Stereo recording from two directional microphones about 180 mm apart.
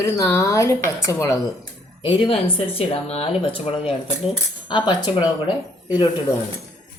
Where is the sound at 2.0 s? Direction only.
30° left (ahead or behind).